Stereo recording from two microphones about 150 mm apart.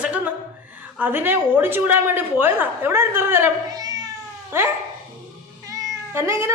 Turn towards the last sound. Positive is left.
turn(degrees=-20)  # may be behind; listen again after turning